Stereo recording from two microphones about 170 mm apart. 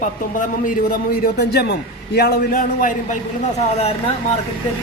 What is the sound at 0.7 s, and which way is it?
A man's voice, 65° left (ahead or behind).